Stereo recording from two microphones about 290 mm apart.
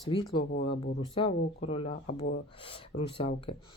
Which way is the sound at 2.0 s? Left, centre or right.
Left.